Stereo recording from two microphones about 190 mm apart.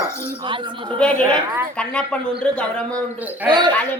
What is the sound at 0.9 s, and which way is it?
Speech, 5° left (ahead or behind).